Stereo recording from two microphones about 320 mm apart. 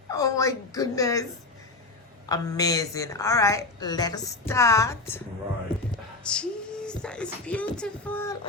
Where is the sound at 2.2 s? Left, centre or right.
Centre.